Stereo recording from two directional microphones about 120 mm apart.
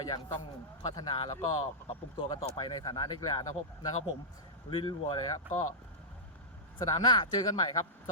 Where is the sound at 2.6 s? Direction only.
35° left (ahead or behind).